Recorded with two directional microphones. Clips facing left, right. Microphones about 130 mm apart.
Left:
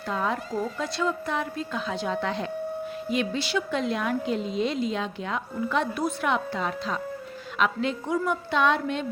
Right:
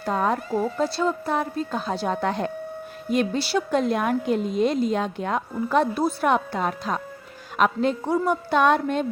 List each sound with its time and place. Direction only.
0.0 s a woman's voice: 45° right (ahead or behind)
6.3 s a woman's voice: 50° right (ahead or behind)